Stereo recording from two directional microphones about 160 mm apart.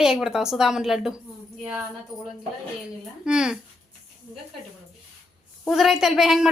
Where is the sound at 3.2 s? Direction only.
5° right (ahead or behind).